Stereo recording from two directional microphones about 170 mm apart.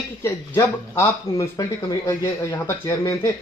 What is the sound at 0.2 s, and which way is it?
A man's voice, 15° left (ahead or behind).